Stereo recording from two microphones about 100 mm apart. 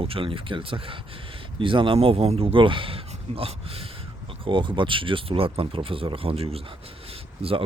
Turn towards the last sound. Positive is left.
turn(degrees=-90)